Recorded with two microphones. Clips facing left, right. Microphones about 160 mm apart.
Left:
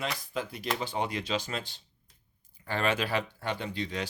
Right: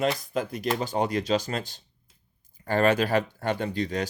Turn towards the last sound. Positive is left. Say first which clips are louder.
# right 6 dB
turn(degrees=-45)  # may be behind; listen again after turning